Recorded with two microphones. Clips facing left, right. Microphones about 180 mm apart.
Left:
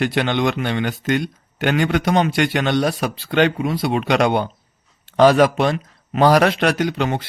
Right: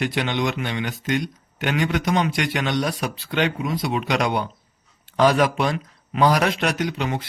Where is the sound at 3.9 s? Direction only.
60° left (ahead or behind).